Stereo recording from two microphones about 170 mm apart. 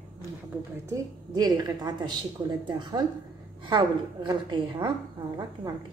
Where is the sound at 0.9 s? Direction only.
20° right (ahead or behind).